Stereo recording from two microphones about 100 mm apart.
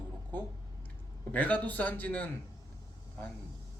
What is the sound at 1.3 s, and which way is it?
Speech, 15° left (ahead or behind).